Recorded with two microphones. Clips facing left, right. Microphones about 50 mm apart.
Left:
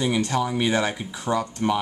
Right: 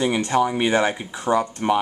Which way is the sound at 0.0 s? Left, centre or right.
Right.